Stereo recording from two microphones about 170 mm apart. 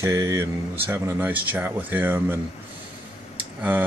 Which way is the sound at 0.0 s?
20° right (ahead or behind).